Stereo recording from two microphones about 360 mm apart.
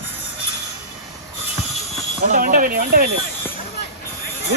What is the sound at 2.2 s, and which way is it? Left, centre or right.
Speech, right.